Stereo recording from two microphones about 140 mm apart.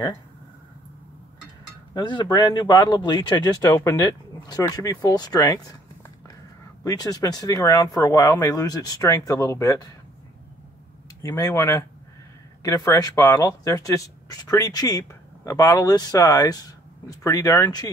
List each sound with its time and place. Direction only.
2.0 s speech: 30° left (ahead or behind)
3.6 s speech: 20° left (ahead or behind)
6.8 s speech: 25° left (ahead or behind)
11.2 s speech: 25° left (ahead or behind)